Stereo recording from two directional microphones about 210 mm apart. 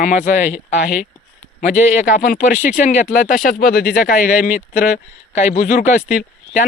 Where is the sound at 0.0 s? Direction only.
35° left (ahead or behind).